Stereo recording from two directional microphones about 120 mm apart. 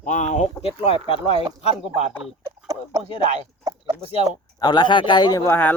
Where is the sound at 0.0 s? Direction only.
90° left; by 0.5 s 75° left (ahead or behind).